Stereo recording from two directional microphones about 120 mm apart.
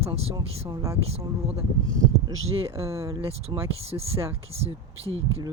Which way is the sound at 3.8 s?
55° right (ahead or behind).